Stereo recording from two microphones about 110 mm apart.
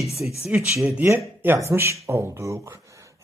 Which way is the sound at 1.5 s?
25° right (ahead or behind).